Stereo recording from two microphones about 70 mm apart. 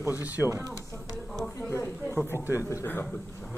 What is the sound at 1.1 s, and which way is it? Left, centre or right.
Speech, centre.